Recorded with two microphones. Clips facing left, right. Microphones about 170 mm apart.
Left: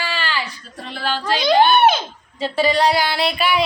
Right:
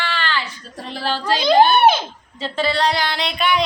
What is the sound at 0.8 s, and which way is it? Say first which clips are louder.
Speech: even; 40° right (ahead or behind).